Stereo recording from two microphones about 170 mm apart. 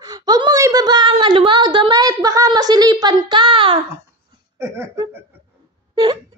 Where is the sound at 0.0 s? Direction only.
20° right (ahead or behind).